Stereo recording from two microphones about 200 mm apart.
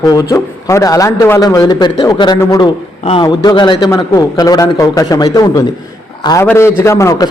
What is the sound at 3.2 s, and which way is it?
A man's voice, 20° left (ahead or behind).